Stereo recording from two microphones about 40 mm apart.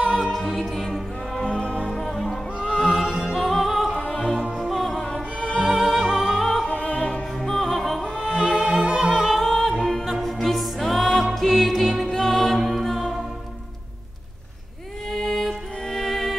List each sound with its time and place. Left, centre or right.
0.0 s music: centre
1.4 s music: left
2.6 s music: centre
3.3 s music: centre
4.1 s music: centre
5.0 s music: left
5.8 s music: centre
6.6 s opera: left
7.3 s music: centre
8.5 s opera: centre
9.3 s music: centre
12.1 s music: centre
12.5 s music: centre
15.0 s music: centre